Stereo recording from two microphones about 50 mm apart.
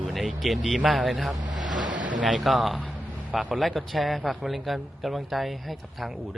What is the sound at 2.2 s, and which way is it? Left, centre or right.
A man's voice, centre.